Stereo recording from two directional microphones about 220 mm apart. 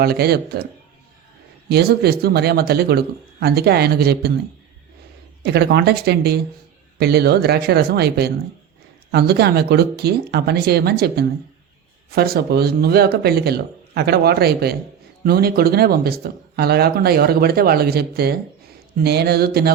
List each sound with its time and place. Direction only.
0.0 s speech: 45° right (ahead or behind)
1.7 s speech: 45° right (ahead or behind)
5.4 s speech: 50° right (ahead or behind)